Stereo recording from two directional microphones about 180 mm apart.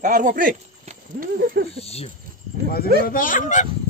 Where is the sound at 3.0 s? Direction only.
50° left (ahead or behind).